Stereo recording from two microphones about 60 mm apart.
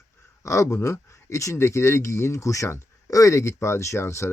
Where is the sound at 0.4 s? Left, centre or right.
Left.